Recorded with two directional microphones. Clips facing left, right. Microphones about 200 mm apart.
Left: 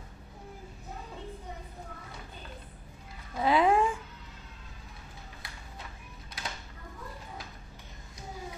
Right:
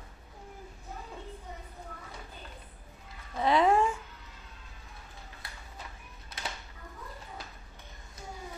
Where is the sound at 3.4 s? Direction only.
5° left (ahead or behind).